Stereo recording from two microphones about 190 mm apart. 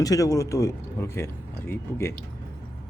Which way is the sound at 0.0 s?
20° left (ahead or behind).